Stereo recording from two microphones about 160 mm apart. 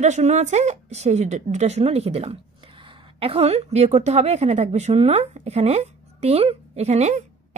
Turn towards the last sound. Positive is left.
turn(degrees=-45)  # may be behind; listen again after turning